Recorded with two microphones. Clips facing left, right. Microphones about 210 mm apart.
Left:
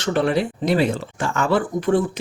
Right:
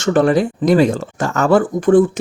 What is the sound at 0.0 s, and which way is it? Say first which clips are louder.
Speech: right 6 dB; 45° right (ahead or behind).